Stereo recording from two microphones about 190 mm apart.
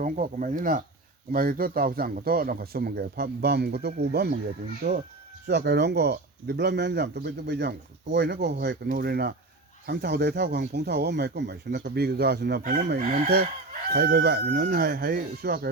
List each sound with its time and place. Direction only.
0.0 s a man's voice: 45° right (ahead or behind)